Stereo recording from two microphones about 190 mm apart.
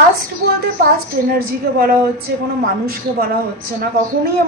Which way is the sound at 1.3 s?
50° right (ahead or behind).